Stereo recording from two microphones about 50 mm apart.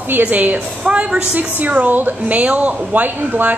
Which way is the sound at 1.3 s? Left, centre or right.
Right.